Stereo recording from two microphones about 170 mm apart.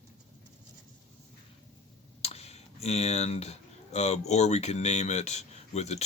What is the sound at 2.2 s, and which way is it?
Speech, 40° left (ahead or behind).